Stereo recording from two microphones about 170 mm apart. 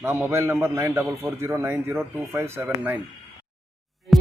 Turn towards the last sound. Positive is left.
turn(degrees=0)  # may be behind; listen again after turning